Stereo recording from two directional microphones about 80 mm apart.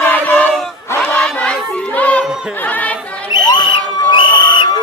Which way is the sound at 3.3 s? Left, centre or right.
Left.